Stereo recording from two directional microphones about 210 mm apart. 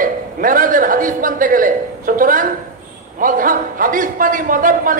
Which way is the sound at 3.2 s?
40° right (ahead or behind).